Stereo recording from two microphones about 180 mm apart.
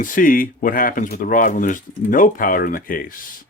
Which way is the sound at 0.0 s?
50° left (ahead or behind).